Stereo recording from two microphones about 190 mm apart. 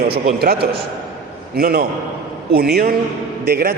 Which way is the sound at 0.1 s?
55° right (ahead or behind).